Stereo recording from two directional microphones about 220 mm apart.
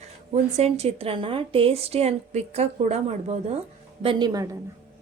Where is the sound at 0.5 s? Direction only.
30° right (ahead or behind).